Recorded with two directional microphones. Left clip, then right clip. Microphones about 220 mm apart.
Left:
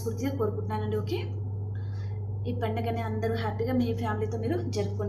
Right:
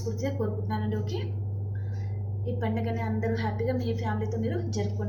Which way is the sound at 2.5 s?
30° left (ahead or behind).